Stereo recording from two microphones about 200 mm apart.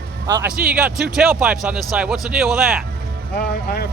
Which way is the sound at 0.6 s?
5° right (ahead or behind).